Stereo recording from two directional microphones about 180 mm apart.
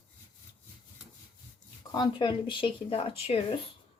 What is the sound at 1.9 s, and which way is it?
Speech, 25° left (ahead or behind).